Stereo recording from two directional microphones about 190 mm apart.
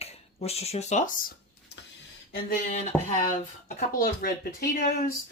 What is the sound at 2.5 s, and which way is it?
Speech, 40° left (ahead or behind).